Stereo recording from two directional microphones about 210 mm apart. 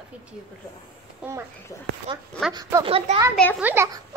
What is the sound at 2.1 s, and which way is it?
Speech, 25° right (ahead or behind).